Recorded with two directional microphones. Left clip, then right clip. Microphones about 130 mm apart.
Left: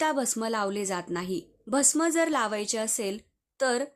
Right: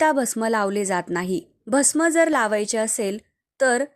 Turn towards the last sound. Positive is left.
turn(degrees=-40)  # may be behind; listen again after turning